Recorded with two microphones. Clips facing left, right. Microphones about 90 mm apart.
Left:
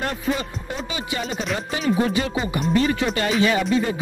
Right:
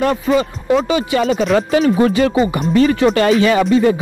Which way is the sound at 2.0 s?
65° right (ahead or behind).